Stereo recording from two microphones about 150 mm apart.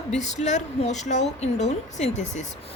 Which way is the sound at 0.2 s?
50° left (ahead or behind).